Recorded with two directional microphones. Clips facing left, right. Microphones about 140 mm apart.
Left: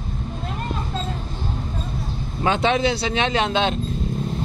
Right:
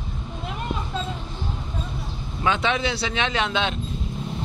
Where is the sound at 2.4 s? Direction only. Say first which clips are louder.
Left 4 dB; 40° left (ahead or behind).